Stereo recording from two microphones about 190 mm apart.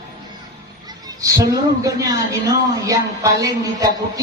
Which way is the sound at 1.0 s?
15° right (ahead or behind).